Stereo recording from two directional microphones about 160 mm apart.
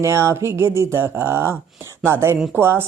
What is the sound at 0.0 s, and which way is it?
Speech, 15° right (ahead or behind).